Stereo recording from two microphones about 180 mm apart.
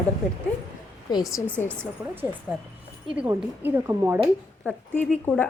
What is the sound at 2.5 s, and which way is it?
A woman's voice, 10° right (ahead or behind).